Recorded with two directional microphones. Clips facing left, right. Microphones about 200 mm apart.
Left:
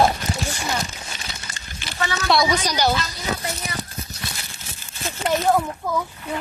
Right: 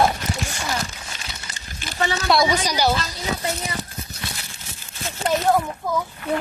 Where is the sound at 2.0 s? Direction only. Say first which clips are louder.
Right 2 dB; 30° right (ahead or behind).